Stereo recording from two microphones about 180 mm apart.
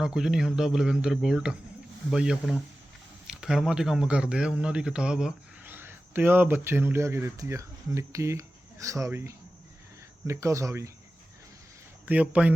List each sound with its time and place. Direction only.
0.0 s a man's voice: 5° right (ahead or behind)
12.0 s speech: 10° right (ahead or behind)